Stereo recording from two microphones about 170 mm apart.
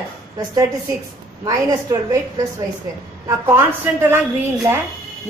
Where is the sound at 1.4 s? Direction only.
20° right (ahead or behind).